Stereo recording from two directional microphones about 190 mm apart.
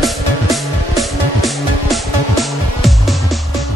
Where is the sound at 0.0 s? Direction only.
Centre (ahead or behind).